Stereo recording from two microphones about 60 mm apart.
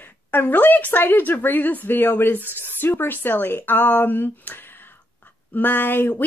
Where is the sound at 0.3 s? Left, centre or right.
Left.